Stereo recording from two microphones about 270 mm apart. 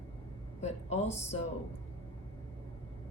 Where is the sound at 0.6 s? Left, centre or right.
Left.